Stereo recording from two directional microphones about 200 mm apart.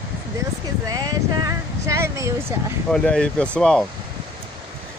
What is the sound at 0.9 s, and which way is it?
Speech, 20° right (ahead or behind).